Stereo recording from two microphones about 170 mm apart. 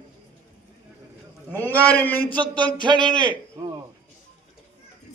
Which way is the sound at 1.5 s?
10° left (ahead or behind).